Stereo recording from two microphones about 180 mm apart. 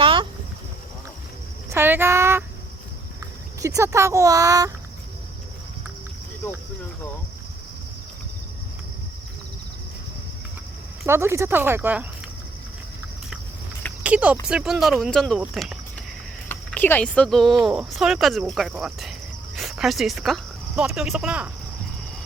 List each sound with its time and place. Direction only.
0.0 s a sound: 30° right (ahead or behind)
1.7 s a sound: 10° right (ahead or behind)
3.6 s speech: 15° right (ahead or behind)
11.0 s speech: 15° right (ahead or behind)
14.0 s speech: 10° right (ahead or behind)
16.5 s speech: 10° left (ahead or behind); by 21.5 s 5° right (ahead or behind)